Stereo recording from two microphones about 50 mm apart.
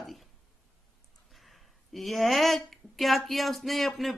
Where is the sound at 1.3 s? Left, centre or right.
Centre.